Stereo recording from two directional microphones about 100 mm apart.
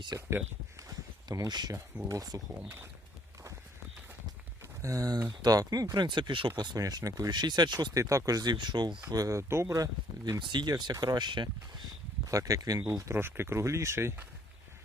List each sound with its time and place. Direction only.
0.1 s speech: 40° right (ahead or behind)
0.8 s a sound: 35° right (ahead or behind)
2.0 s speech: 35° right (ahead or behind)
2.6 s speech: 25° right (ahead or behind)
4.8 s speech: 35° right (ahead or behind); by 6.5 s 50° right (ahead or behind)
6.6 s speech: 40° right (ahead or behind)
7.9 s speech: 35° right (ahead or behind); by 9.0 s 50° right (ahead or behind)
9.0 s speech: 35° right (ahead or behind)
10.4 s speech: 50° right (ahead or behind)
12.3 s speech: 35° right (ahead or behind)
13.1 s speech: 25° right (ahead or behind)